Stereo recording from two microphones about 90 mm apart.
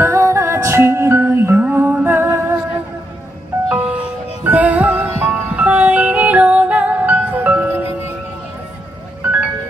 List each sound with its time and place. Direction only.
0.0 s music: 30° right (ahead or behind)
3.6 s music: 15° right (ahead or behind)